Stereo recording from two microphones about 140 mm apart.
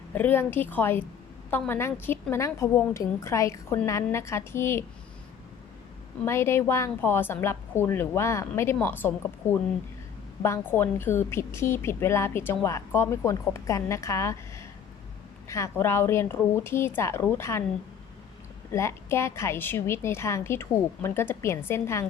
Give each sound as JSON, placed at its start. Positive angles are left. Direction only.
{"t": 0.1, "sound": "a woman's voice", "side_deg": 15}
{"t": 6.2, "sound": "a woman's voice", "side_deg": 20}
{"t": 18.7, "sound": "a woman's voice", "side_deg": 20}